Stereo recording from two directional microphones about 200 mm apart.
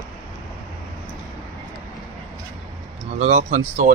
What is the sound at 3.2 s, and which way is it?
Speech, 35° right (ahead or behind).